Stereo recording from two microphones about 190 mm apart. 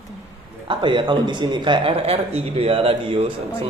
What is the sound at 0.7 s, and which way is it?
A man's voice, 25° right (ahead or behind).